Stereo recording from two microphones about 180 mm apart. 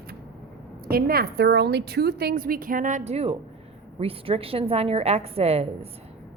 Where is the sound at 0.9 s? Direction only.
55° right (ahead or behind); by 5.9 s 35° right (ahead or behind).